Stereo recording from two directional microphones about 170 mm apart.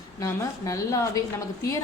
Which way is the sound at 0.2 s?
20° left (ahead or behind).